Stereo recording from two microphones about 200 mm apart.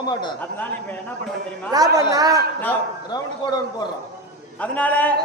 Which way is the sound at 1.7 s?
20° right (ahead or behind).